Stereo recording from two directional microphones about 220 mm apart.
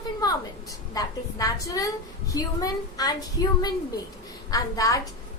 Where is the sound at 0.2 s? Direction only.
15° left (ahead or behind).